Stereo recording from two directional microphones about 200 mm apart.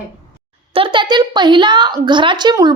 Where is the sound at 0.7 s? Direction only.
25° right (ahead or behind).